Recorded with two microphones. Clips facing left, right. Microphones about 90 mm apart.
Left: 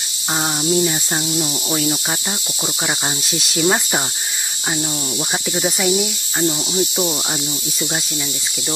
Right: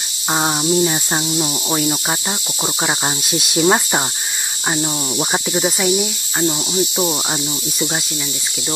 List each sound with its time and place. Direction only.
0.4 s cricket: 25° right (ahead or behind)
5.5 s cricket: 10° right (ahead or behind)